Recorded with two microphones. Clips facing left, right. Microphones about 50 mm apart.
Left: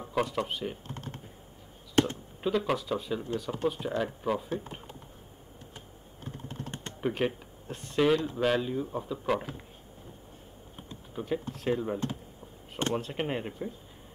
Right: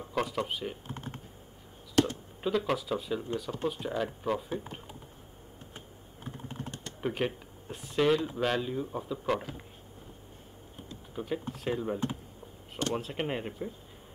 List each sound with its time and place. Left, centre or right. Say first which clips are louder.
0.0 s speech: left 2 dB; centre
0.8 s typing: even; centre
2.0 s speech: left 1 dB; left
2.4 s speech: left 1 dB; centre
7.0 s speech: left 2 dB; centre
11.1 s speech: left 2 dB; centre